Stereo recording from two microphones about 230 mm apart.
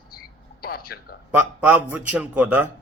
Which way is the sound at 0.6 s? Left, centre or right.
Left.